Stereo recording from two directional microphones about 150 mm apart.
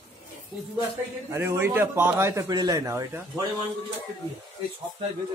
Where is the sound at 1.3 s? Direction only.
15° right (ahead or behind).